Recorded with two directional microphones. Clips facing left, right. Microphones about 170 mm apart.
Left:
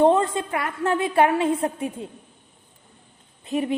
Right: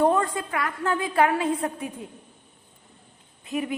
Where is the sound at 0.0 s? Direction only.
25° left (ahead or behind).